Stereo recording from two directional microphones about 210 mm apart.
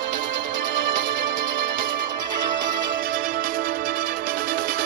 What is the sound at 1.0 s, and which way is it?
Music, 40° right (ahead or behind).